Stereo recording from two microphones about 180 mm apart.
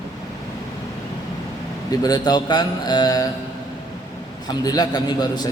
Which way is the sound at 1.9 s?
20° left (ahead or behind).